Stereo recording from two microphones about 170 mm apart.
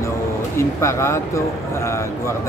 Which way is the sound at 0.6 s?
15° left (ahead or behind).